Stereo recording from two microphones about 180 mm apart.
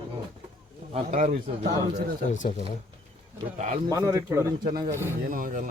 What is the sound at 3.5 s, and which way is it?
Speech, 40° right (ahead or behind).